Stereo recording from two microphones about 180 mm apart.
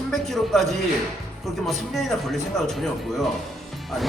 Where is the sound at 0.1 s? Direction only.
Centre (ahead or behind).